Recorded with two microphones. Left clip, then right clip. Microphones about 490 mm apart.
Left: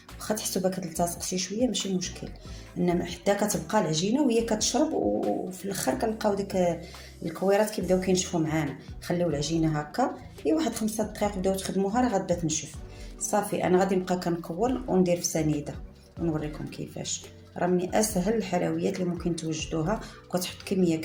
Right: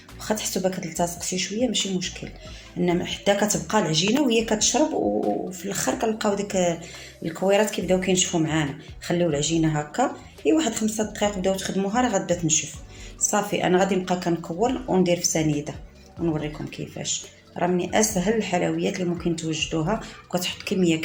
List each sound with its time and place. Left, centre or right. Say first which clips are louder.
0.2 s speech: right 3 dB; left